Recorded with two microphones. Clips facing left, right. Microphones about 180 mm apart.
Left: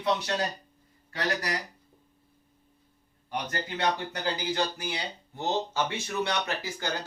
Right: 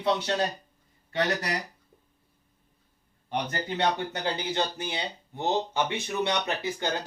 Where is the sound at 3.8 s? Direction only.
25° right (ahead or behind).